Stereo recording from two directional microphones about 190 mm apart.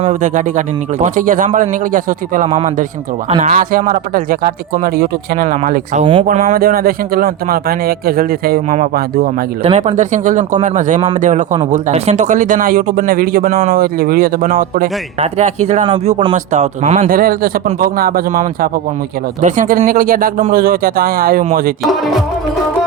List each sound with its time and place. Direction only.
0.0 s speech: 40° right (ahead or behind)
3.2 s speech: 30° right (ahead or behind)
3.5 s speech: 45° right (ahead or behind)
9.6 s speech: 35° right (ahead or behind)
17.2 s speech: 50° right (ahead or behind)
19.4 s speech: 40° right (ahead or behind)